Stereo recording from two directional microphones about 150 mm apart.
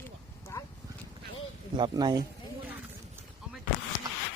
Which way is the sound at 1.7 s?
30° right (ahead or behind).